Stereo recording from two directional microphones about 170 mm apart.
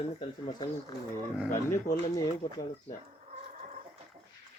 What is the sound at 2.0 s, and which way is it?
Speech, 25° left (ahead or behind).